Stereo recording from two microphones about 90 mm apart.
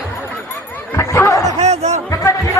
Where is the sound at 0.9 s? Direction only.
30° left (ahead or behind).